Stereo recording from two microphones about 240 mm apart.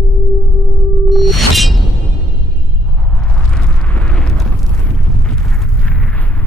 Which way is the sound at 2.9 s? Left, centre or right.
Centre.